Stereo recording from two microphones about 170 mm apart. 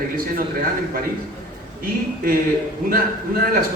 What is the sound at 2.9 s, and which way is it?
Speech, 60° right (ahead or behind).